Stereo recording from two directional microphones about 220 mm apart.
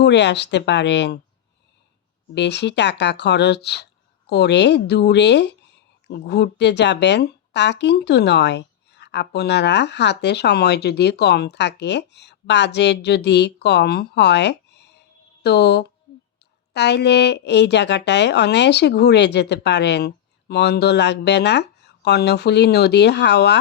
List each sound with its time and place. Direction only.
0.0 s speech: 50° left (ahead or behind)
2.3 s speech: 50° left (ahead or behind)